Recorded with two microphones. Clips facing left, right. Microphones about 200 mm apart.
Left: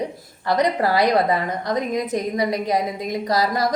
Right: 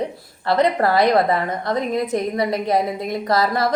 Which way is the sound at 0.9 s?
15° left (ahead or behind).